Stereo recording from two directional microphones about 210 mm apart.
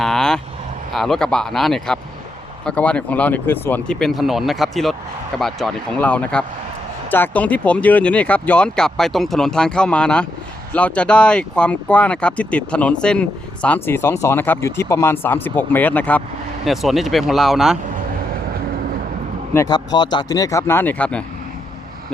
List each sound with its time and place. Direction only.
0.0 s speech: 5° left (ahead or behind)
19.5 s speech: 20° left (ahead or behind)